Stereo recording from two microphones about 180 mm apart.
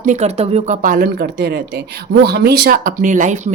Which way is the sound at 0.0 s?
40° right (ahead or behind).